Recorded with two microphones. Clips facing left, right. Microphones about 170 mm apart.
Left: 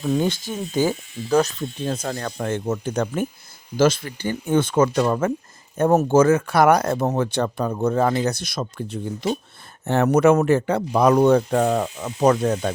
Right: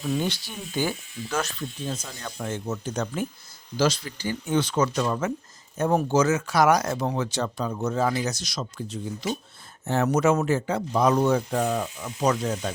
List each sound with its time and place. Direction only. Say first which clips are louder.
0.0 s speech: left 6 dB; 50° left (ahead or behind)
1.8 s speech: left 9 dB; 65° left (ahead or behind)